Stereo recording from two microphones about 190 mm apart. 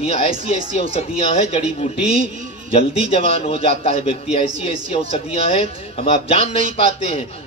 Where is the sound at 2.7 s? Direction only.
30° left (ahead or behind).